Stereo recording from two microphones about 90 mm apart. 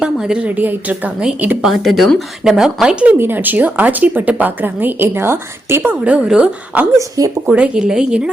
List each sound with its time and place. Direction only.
0.0 s a woman's voice: 10° right (ahead or behind)
1.6 s speech: centre (ahead or behind)
3.2 s a woman's voice: 25° right (ahead or behind)